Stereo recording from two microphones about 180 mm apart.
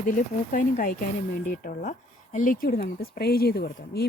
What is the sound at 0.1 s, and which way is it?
A woman's voice, 45° left (ahead or behind).